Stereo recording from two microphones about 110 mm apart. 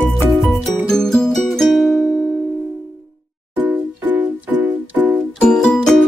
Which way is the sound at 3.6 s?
15° right (ahead or behind).